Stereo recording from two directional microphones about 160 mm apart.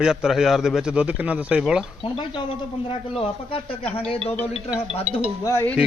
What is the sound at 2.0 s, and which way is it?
A man's voice, 30° left (ahead or behind).